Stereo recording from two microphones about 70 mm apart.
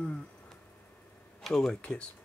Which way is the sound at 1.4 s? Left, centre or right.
Centre.